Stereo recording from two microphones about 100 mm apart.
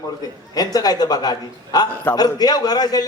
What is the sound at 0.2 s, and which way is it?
A man's voice, 40° left (ahead or behind).